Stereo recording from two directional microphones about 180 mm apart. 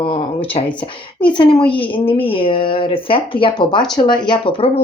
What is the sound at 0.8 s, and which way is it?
A woman's voice, 25° left (ahead or behind).